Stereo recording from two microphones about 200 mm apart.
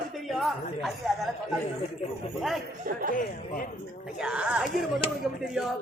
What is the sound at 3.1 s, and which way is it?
Speech, 40° left (ahead or behind).